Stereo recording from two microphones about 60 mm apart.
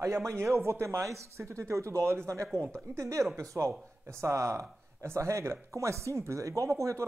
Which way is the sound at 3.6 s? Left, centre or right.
Right.